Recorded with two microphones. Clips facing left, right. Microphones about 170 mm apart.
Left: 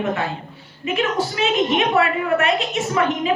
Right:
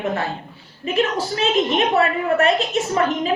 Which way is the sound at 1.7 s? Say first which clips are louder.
Even; 35° right (ahead or behind).